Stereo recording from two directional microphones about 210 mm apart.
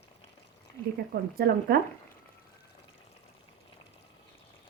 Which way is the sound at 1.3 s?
45° right (ahead or behind).